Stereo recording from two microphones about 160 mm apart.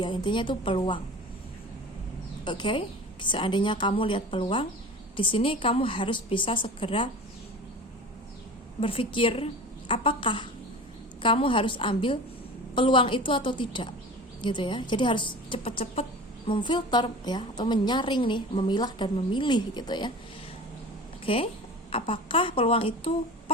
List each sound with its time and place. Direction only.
0.0 s a woman's voice: 30° left (ahead or behind)
2.4 s a woman's voice: 30° left (ahead or behind)
8.8 s a woman's voice: 35° left (ahead or behind)
21.2 s a woman's voice: 35° left (ahead or behind)